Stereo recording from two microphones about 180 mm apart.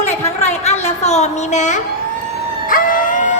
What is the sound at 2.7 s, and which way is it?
Vehicle, 50° left (ahead or behind).